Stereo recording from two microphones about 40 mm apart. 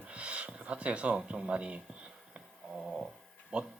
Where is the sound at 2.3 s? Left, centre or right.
Centre.